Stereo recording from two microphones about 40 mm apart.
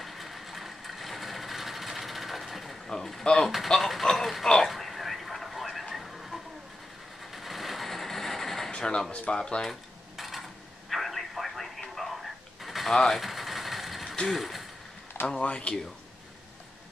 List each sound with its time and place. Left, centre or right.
0.0 s vehicle: centre
2.9 s speech: centre
4.6 s a sound: centre
7.3 s vehicle: centre
8.7 s a sound: left
9.1 s speech: left
10.1 s a sound: centre
10.9 s radio: centre
12.9 s speech: centre
13.2 s vehicle: centre
14.2 s speech: centre
15.2 s speech: left